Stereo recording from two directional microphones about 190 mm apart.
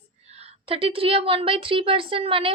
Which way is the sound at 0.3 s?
35° right (ahead or behind).